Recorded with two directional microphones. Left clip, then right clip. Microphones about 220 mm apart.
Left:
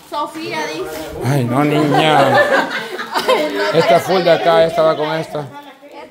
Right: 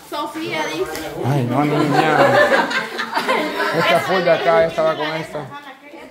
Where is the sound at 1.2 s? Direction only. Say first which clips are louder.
Left 3 dB; 25° left (ahead or behind).